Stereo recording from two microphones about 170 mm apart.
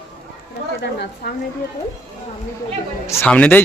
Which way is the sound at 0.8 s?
70° left (ahead or behind).